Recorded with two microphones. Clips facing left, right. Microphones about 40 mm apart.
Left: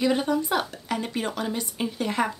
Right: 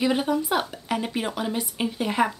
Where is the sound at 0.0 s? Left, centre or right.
Centre.